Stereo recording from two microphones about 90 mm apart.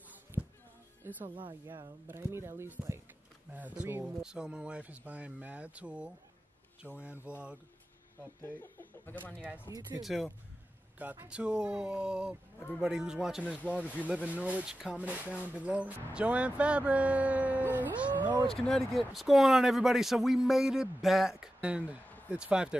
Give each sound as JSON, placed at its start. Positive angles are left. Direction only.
{"t": 0.4, "sound": "music", "side_deg": -15}
{"t": 1.0, "sound": "speech", "side_deg": -25}
{"t": 3.5, "sound": "speech", "side_deg": -15}
{"t": 6.9, "sound": "speech", "side_deg": 25}
{"t": 8.4, "sound": "speech", "side_deg": 25}
{"t": 10.0, "sound": "speech", "side_deg": 0}
{"t": 12.5, "sound": "speech", "side_deg": 15}
{"t": 12.8, "sound": "speech", "side_deg": -10}
{"t": 13.6, "sound": "speech", "side_deg": 15}
{"t": 14.0, "sound": "speech", "side_deg": -15}
{"t": 18.5, "sound": "speech", "side_deg": 5}